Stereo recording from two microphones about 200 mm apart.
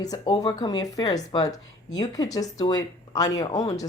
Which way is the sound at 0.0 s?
20° left (ahead or behind).